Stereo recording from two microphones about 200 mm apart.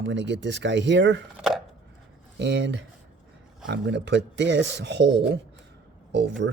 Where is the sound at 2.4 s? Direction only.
60° right (ahead or behind).